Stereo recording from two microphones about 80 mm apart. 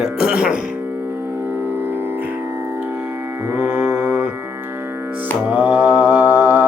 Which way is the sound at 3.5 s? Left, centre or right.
Centre.